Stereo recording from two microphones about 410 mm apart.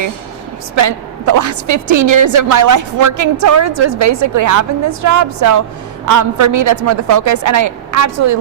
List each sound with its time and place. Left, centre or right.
0.8 s a woman's voice: right